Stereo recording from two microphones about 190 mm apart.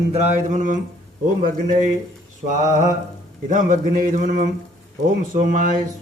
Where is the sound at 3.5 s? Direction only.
45° right (ahead or behind).